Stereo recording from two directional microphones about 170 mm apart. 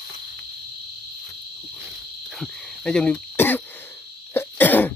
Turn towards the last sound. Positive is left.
turn(degrees=10)  # may be behind; listen again after turning